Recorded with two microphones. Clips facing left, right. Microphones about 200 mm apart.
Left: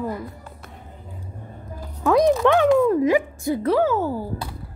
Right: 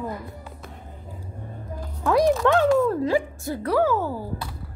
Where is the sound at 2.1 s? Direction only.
20° left (ahead or behind).